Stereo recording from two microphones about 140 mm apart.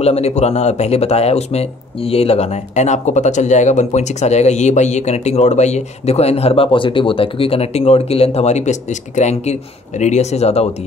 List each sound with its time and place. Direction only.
0.0 s speech: 50° left (ahead or behind)